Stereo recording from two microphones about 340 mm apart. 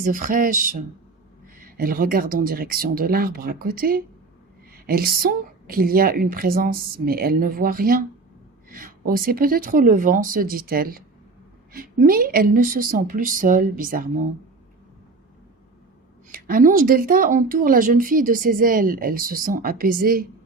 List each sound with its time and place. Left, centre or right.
0.0 s speech: right
16.3 s speech: right